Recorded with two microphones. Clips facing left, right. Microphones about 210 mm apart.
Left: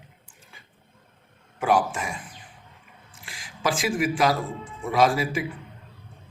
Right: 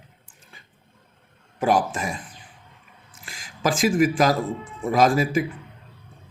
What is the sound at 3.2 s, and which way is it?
Speech, 45° right (ahead or behind).